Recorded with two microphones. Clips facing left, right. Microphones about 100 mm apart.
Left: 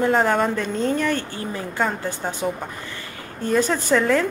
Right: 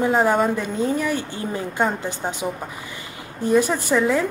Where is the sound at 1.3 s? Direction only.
20° right (ahead or behind).